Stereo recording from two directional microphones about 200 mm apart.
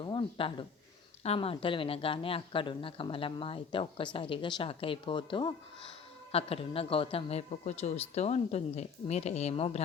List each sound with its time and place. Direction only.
0.0 s speech: 25° left (ahead or behind)